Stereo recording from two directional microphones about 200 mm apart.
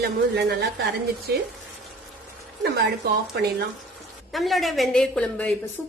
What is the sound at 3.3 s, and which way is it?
Speech, 55° right (ahead or behind).